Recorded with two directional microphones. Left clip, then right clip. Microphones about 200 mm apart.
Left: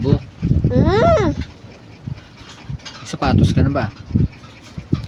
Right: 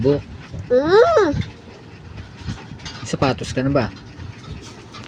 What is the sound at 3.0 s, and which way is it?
Speech, 5° left (ahead or behind).